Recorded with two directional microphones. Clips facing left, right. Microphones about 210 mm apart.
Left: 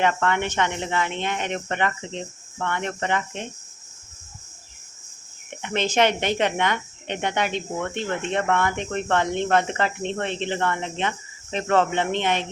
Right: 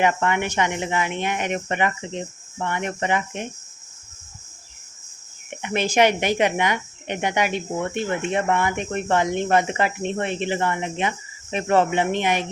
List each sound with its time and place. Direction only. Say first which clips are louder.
0.0 s speech: right 1 dB; 15° right (ahead or behind)
5.6 s speech: right 2 dB; 10° right (ahead or behind)